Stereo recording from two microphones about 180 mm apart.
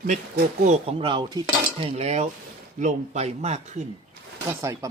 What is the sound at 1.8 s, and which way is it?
Speech, 35° right (ahead or behind).